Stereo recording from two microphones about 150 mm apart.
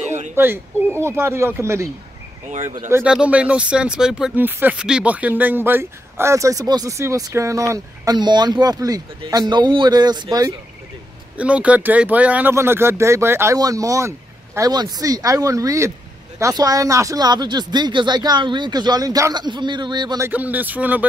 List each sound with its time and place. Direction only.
0.4 s speech: 15° right (ahead or behind)
2.9 s speech: 10° right (ahead or behind); by 10.5 s 25° right (ahead or behind)
11.3 s speech: 10° right (ahead or behind); by 20.2 s 30° right (ahead or behind)
20.2 s speech: 10° right (ahead or behind)